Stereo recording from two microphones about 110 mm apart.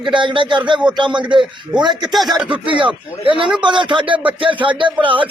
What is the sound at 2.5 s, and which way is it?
Speech, 50° right (ahead or behind).